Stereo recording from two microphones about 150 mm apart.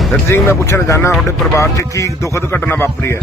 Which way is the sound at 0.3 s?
15° left (ahead or behind).